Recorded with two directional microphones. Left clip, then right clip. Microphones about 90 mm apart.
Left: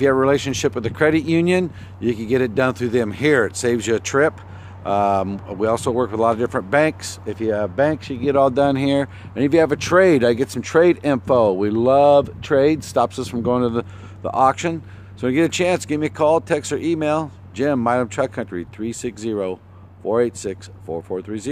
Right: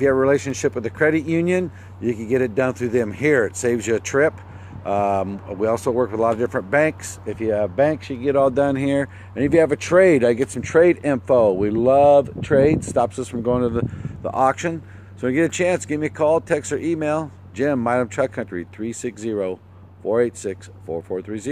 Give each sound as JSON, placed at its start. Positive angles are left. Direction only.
{"t": 0.0, "sound": "speech", "side_deg": 25}
{"t": 14.3, "sound": "speech", "side_deg": 5}